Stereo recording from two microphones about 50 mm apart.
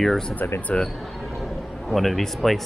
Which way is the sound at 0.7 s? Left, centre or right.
Left.